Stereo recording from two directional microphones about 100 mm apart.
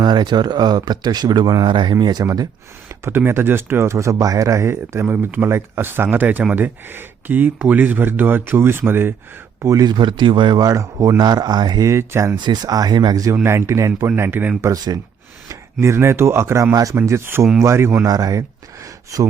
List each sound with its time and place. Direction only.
0.0 s speech: 50° right (ahead or behind)
2.9 s a sound: 25° right (ahead or behind)
3.2 s speech: 25° right (ahead or behind)
9.6 s speech: 35° right (ahead or behind)
9.9 s speech: 50° right (ahead or behind)
11.9 s speech: 30° right (ahead or behind)
12.4 s speech: 45° right (ahead or behind)
13.4 s speech: 25° right (ahead or behind)
14.2 s speech: 20° right (ahead or behind)
14.6 s speech: 40° right (ahead or behind)